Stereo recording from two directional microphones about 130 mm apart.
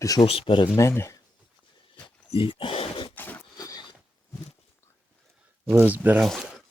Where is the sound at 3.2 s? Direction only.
15° left (ahead or behind).